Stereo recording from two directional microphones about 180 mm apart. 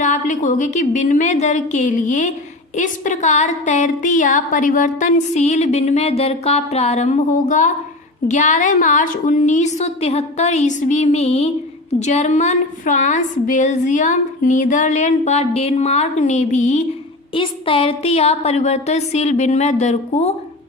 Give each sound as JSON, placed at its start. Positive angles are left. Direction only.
{"t": 0.0, "sound": "a woman's voice", "side_deg": 40}
{"t": 17.3, "sound": "a woman's voice", "side_deg": 30}